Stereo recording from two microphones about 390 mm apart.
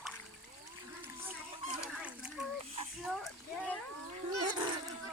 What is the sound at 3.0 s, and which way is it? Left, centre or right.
Speech, centre.